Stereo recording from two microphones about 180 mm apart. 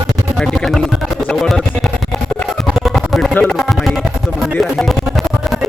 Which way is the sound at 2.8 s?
Centre (ahead or behind).